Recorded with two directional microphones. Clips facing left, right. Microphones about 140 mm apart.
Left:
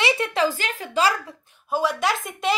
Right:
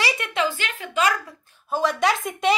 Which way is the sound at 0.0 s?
35° left (ahead or behind).